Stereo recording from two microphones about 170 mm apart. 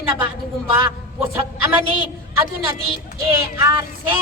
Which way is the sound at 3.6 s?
30° right (ahead or behind).